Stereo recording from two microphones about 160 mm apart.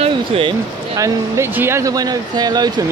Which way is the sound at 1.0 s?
15° right (ahead or behind).